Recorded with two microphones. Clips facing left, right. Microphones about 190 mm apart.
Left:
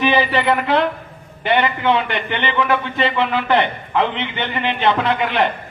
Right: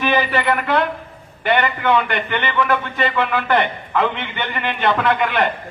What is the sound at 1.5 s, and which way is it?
A man's voice, 50° right (ahead or behind).